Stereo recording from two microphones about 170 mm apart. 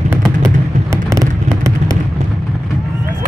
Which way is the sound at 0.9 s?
15° right (ahead or behind).